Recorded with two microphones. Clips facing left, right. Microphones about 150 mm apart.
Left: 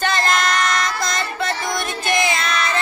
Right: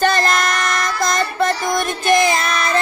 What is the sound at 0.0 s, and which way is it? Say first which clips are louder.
Child singing: right 3 dB; 45° right (ahead or behind).